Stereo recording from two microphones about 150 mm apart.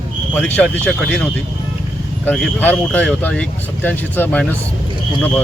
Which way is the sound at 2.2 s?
10° left (ahead or behind).